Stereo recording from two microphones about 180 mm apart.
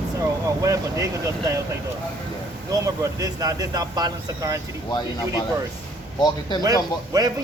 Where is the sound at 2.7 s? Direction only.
20° right (ahead or behind).